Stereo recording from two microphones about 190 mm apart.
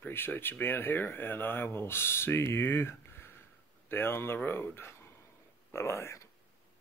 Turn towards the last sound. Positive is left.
turn(degrees=15)  # may be behind; listen again after turning